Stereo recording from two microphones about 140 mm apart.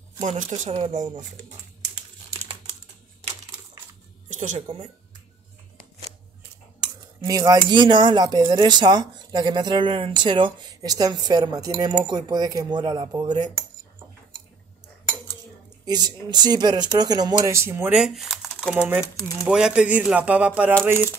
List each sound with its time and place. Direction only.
0.2 s speech: 55° right (ahead or behind)
4.3 s speech: 60° right (ahead or behind)
7.2 s speech: 25° right (ahead or behind)
15.8 s speech: 30° right (ahead or behind)
17.5 s speech: 20° right (ahead or behind); by 18.9 s centre (ahead or behind)
19.1 s speech: 25° left (ahead or behind)
19.4 s speech: 5° right (ahead or behind)